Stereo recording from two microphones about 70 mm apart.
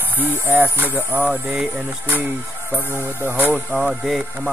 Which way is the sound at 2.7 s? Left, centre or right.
Right.